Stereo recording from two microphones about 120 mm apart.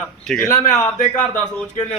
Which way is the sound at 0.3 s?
25° left (ahead or behind).